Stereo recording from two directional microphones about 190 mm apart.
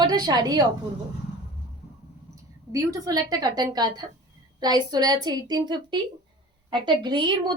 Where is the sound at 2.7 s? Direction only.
20° right (ahead or behind).